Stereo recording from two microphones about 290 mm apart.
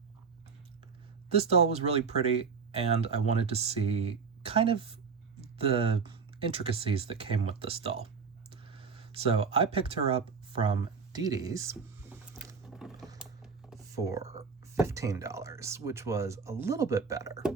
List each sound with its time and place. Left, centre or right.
1.3 s speech: right
8.4 s a sound: centre
13.9 s speech: centre